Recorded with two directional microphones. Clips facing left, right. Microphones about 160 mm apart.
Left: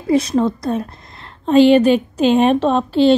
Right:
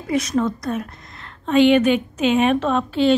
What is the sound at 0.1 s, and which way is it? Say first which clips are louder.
A woman's voice: left 5 dB; 30° left (ahead or behind).